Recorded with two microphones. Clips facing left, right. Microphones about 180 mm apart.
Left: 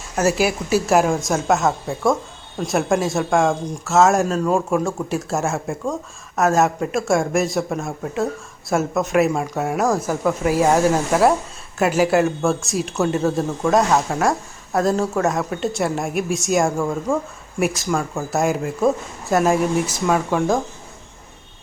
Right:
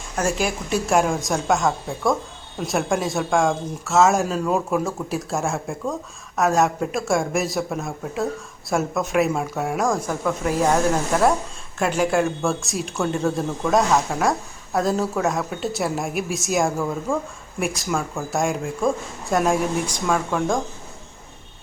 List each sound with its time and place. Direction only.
0.2 s speech: 5° left (ahead or behind)